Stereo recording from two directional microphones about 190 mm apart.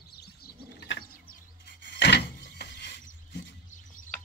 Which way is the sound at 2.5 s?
60° left (ahead or behind).